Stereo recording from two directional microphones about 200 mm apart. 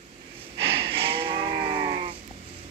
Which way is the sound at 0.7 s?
25° right (ahead or behind).